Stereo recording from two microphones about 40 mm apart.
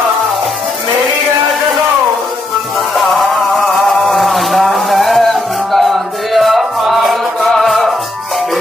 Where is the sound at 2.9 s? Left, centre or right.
Centre.